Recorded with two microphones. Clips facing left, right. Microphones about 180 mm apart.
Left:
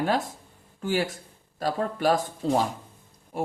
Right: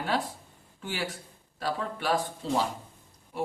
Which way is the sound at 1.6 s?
45° left (ahead or behind).